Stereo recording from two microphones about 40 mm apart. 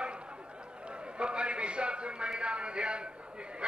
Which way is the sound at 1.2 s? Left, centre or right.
Right.